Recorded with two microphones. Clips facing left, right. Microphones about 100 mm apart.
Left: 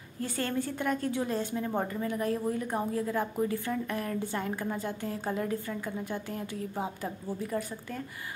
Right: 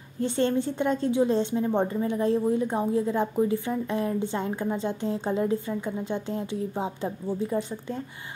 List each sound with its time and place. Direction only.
0.2 s a woman's voice: 25° right (ahead or behind)